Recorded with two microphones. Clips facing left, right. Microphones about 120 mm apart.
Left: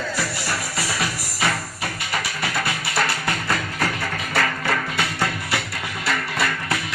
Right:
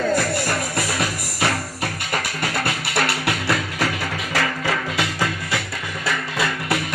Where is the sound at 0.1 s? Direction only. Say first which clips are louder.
Right 6 dB; 50° right (ahead or behind).